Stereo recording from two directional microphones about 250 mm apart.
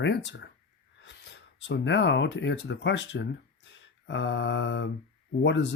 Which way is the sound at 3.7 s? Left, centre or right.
Left.